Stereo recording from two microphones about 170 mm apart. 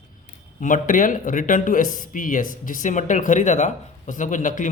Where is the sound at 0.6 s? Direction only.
50° left (ahead or behind).